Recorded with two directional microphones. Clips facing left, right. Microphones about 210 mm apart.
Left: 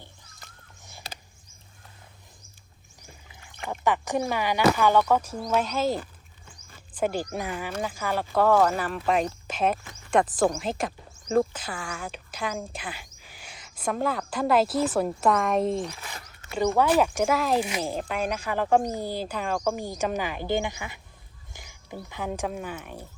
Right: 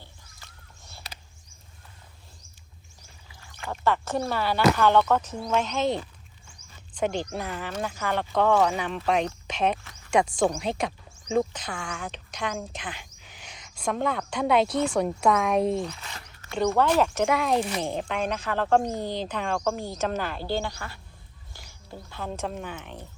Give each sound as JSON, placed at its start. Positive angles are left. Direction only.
{"t": 0.8, "sound": "crow", "side_deg": 15}
{"t": 3.4, "sound": "speech", "side_deg": 15}